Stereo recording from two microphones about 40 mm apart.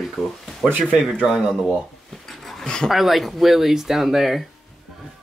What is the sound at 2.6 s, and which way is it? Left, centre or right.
Speech, centre.